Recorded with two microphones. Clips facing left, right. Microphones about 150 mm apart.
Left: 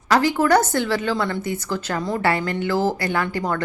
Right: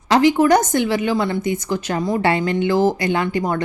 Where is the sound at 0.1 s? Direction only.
20° right (ahead or behind).